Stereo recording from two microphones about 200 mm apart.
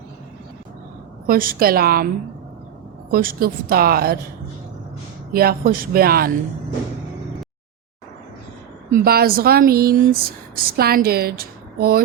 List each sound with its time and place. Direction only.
1.3 s a woman's voice: 45° right (ahead or behind)
3.1 s a woman's voice: 45° right (ahead or behind)
5.3 s a woman's voice: 50° right (ahead or behind)
8.9 s a woman's voice: 50° right (ahead or behind)